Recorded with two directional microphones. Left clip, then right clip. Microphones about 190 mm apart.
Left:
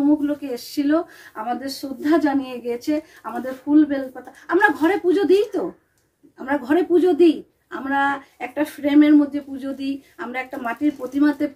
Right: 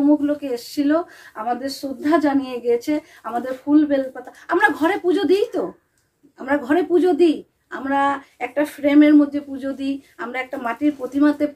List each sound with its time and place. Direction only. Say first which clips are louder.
0.0 s a woman's voice: right 2 dB; 10° right (ahead or behind)